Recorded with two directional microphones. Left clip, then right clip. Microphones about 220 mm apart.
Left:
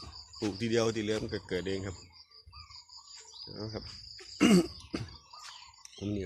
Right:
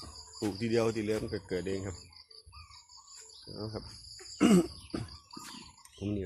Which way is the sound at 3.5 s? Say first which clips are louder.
Right 1 dB; 5° left (ahead or behind).